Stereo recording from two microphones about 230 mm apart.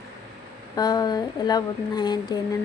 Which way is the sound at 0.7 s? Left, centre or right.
Centre.